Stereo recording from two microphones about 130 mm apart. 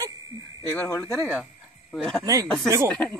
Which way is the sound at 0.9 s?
25° left (ahead or behind).